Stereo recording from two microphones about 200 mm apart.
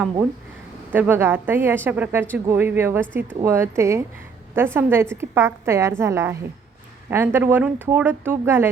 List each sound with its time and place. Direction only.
0.9 s speech: 10° right (ahead or behind)